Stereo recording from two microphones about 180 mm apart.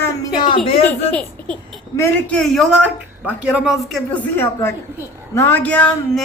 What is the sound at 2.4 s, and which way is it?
A woman's voice, centre (ahead or behind).